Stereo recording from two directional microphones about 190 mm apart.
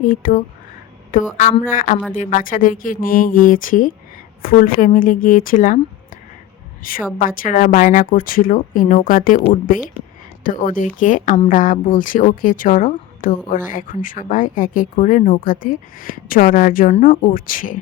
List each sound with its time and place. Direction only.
0.0 s a woman's voice: 45° left (ahead or behind)
6.8 s a woman's voice: 50° left (ahead or behind)